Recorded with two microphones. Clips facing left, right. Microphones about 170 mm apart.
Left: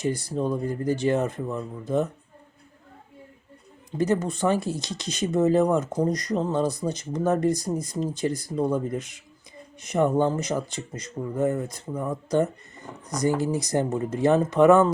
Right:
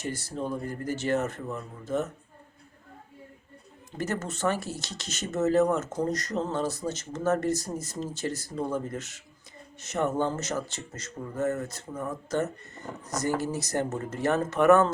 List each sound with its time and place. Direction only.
0.0 s speech: 15° left (ahead or behind)
3.9 s speech: 15° left (ahead or behind)